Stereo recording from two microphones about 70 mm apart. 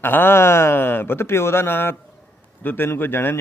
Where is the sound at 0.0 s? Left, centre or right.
Left.